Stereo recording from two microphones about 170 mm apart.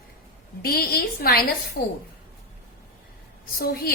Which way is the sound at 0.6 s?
65° left (ahead or behind).